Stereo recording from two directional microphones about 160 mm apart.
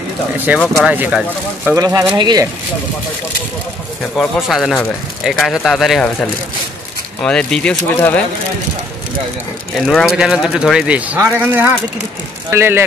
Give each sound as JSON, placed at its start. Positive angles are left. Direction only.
{"t": 0.5, "sound": "speech", "side_deg": -10}
{"t": 1.8, "sound": "speech", "side_deg": -20}
{"t": 4.2, "sound": "speech", "side_deg": 0}
{"t": 7.2, "sound": "speech", "side_deg": 5}
{"t": 9.8, "sound": "speech", "side_deg": 0}